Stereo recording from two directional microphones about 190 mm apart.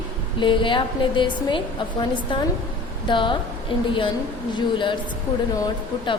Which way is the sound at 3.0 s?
25° left (ahead or behind).